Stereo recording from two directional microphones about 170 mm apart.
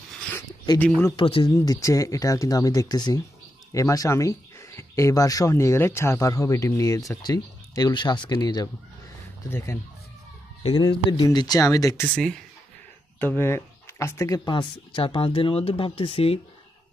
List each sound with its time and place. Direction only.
0.7 s speech: 10° left (ahead or behind)
1.1 s speech: 30° left (ahead or behind)
1.5 s speech: 20° left (ahead or behind)
10.6 s speech: 30° left (ahead or behind)
13.2 s speech: 10° left (ahead or behind); by 16.3 s 35° left (ahead or behind)